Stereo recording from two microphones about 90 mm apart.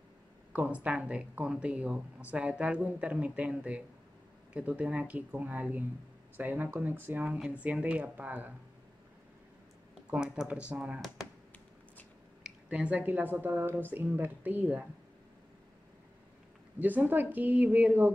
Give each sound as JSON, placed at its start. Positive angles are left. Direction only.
{"t": 0.5, "sound": "a woman's voice", "side_deg": -15}
{"t": 10.1, "sound": "speech", "side_deg": -10}
{"t": 12.4, "sound": "a woman's voice", "side_deg": -15}
{"t": 16.8, "sound": "a woman's voice", "side_deg": -20}